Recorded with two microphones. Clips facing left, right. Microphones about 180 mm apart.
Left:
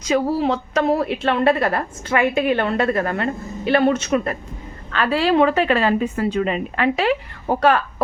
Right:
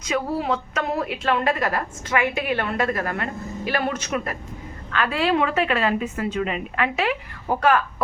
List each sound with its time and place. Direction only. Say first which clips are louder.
0.0 s a woman's voice: left 6 dB; 30° left (ahead or behind)